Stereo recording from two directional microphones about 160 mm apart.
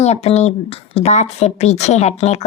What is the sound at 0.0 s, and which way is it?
Speech, 40° left (ahead or behind).